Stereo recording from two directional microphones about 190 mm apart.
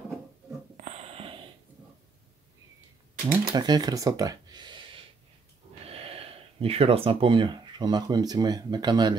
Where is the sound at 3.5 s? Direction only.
20° right (ahead or behind).